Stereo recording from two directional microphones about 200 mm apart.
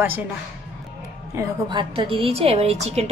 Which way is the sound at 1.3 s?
20° right (ahead or behind).